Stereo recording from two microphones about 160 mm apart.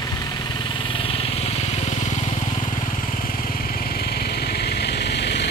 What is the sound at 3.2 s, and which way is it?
Vehicle, 65° left (ahead or behind).